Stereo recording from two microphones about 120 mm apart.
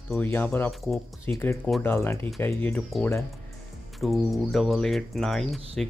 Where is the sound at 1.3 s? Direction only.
15° left (ahead or behind).